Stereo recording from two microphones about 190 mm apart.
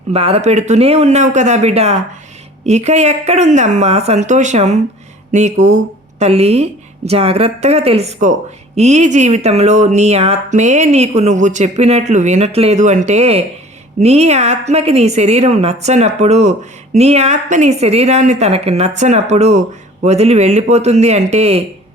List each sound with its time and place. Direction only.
0.1 s speech: 30° right (ahead or behind)